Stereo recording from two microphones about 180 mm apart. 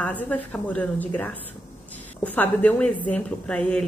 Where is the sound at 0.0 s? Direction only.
10° left (ahead or behind).